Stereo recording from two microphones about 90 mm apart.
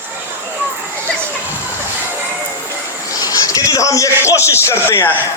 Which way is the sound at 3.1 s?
40° left (ahead or behind).